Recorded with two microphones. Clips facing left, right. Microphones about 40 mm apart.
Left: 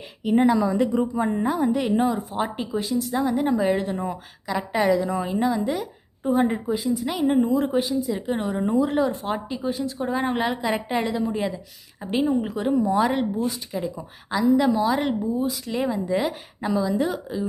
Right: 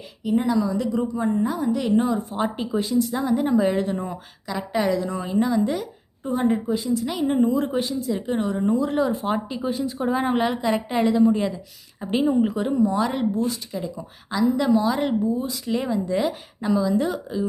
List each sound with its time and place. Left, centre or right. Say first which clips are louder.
0.4 s a woman's voice: left 3 dB; left
2.0 s a woman's voice: right 1 dB; centre